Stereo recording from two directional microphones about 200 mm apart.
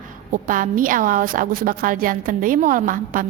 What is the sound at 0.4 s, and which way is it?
A woman's voice, 40° right (ahead or behind).